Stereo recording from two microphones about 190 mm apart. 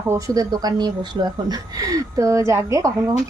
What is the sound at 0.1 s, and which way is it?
Speech, 20° right (ahead or behind).